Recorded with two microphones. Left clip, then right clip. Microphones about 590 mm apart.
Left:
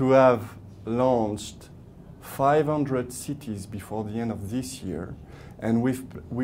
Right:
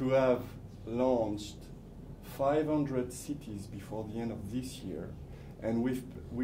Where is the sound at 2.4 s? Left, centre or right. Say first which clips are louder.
Left 8 dB; left.